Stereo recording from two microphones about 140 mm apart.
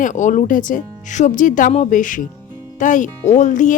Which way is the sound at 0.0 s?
65° left (ahead or behind).